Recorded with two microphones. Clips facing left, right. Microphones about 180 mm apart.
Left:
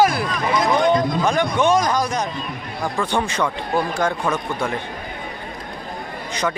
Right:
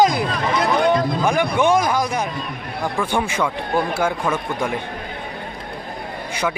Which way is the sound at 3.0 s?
10° right (ahead or behind).